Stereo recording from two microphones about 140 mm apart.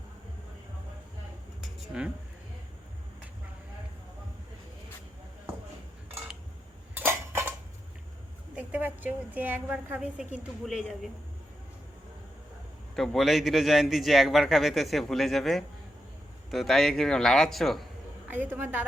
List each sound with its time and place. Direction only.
1.9 s a woman's voice: 5° right (ahead or behind)
6.9 s tick-tock: 15° right (ahead or behind)
8.5 s a woman's voice: 10° right (ahead or behind)
13.0 s a man's voice: centre (ahead or behind)
18.3 s a woman's voice: 15° right (ahead or behind)